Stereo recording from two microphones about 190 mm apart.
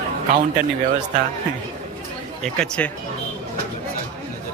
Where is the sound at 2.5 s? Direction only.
5° left (ahead or behind).